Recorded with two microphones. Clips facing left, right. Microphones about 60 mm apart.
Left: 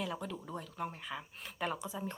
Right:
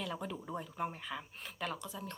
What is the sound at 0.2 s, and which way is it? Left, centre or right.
Speech, centre.